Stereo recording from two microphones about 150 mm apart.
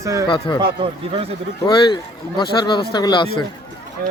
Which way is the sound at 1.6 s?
30° left (ahead or behind).